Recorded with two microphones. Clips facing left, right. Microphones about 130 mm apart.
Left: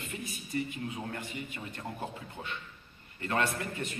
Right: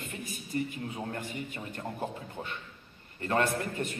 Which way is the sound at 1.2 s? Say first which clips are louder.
Right 2 dB; 50° right (ahead or behind).